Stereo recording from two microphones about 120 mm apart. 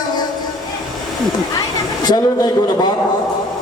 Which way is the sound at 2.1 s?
35° left (ahead or behind).